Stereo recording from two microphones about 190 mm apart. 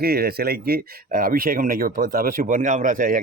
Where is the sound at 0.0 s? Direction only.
55° right (ahead or behind).